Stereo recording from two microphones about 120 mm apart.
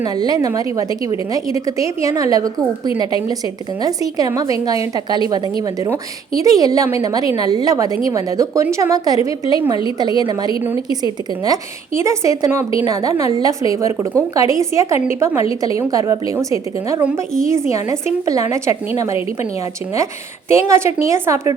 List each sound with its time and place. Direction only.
0.0 s a woman's voice: 35° right (ahead or behind)
20.5 s a woman's voice: 25° right (ahead or behind)